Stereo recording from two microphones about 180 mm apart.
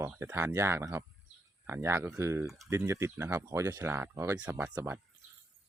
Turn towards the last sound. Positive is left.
turn(degrees=-15)  # may be behind; listen again after turning